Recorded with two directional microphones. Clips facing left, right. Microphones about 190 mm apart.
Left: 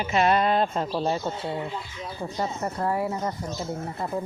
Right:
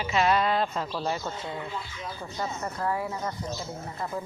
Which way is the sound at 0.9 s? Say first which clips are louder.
Left 4 dB; 25° left (ahead or behind).